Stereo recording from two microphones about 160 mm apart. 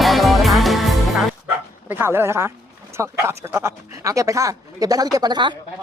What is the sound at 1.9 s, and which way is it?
Speech, 15° right (ahead or behind).